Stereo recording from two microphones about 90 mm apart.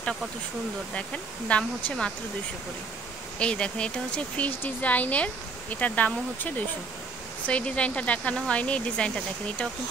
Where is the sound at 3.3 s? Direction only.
10° left (ahead or behind).